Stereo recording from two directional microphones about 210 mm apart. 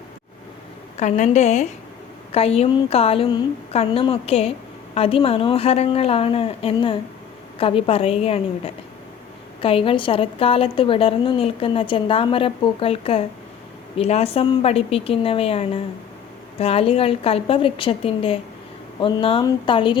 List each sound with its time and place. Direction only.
0.9 s a woman's voice: 35° left (ahead or behind)